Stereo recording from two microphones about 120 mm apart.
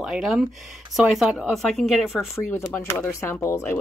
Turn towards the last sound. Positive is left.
turn(degrees=20)  # may be behind; listen again after turning